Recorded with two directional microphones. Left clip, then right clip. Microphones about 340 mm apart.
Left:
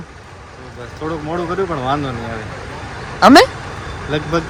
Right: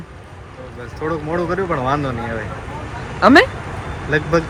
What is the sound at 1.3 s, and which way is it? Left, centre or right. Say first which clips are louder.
Speech: left 1 dB; centre.